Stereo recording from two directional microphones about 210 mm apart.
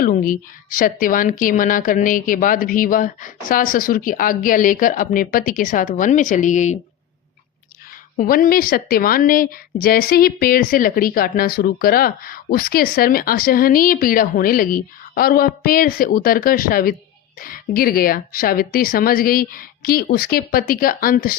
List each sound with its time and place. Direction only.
0.0 s a woman's voice: 40° left (ahead or behind)
8.1 s a woman's voice: 40° left (ahead or behind)